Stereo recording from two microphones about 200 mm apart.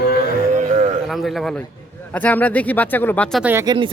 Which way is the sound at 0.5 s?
40° right (ahead or behind).